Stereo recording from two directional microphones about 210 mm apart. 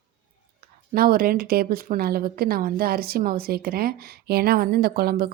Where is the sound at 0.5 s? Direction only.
45° right (ahead or behind).